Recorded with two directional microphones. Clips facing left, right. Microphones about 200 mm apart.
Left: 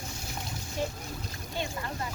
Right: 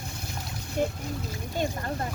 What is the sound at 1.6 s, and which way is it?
Speech, 50° right (ahead or behind).